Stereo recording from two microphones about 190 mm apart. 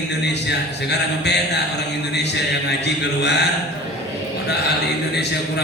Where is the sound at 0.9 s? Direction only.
60° left (ahead or behind).